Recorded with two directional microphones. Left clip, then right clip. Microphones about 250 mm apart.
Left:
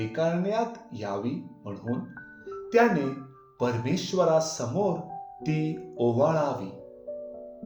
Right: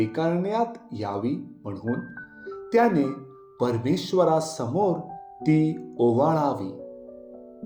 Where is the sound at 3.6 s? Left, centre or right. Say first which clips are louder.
Right 3 dB; centre.